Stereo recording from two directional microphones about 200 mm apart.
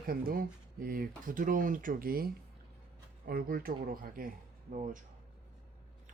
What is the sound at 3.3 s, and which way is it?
Speech, 45° right (ahead or behind).